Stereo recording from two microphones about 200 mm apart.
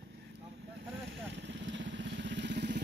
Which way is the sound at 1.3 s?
65° right (ahead or behind).